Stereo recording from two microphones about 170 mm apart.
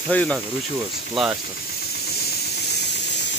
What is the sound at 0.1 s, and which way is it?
Speech, 10° left (ahead or behind).